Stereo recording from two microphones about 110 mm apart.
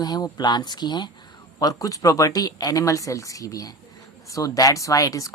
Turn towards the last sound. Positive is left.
turn(degrees=30)  # may be behind; listen again after turning